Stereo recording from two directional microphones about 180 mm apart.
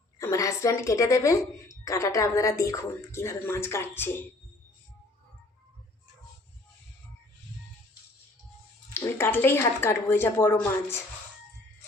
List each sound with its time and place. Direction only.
0.2 s a woman's voice: 15° left (ahead or behind)
8.9 s a woman's voice: 15° left (ahead or behind)